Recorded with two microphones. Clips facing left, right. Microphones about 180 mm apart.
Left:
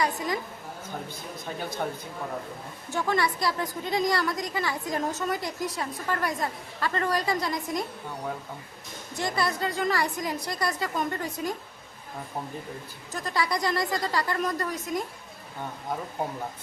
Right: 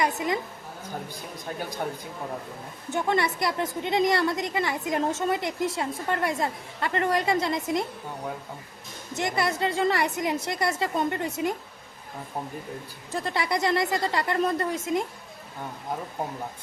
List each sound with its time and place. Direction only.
0.0 s a woman's voice: 20° right (ahead or behind)
2.9 s a woman's voice: 20° right (ahead or behind)
9.1 s a woman's voice: 20° right (ahead or behind)
13.1 s a woman's voice: 25° right (ahead or behind)